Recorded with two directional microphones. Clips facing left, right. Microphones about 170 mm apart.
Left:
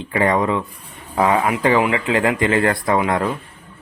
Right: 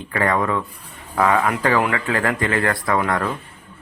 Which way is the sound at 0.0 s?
20° left (ahead or behind).